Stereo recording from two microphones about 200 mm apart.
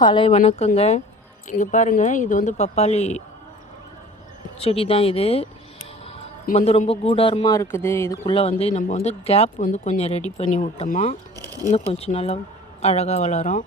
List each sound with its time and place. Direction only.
0.0 s speech: 25° left (ahead or behind)
0.3 s speech: 35° left (ahead or behind)
4.6 s speech: 30° left (ahead or behind); by 8.3 s 15° left (ahead or behind)
8.3 s speech: 30° left (ahead or behind)